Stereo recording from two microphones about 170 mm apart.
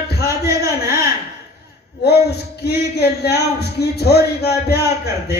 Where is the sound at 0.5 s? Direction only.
15° right (ahead or behind).